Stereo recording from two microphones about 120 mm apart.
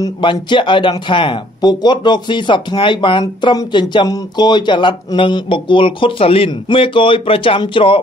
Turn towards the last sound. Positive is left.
turn(degrees=45)  # may be behind; listen again after turning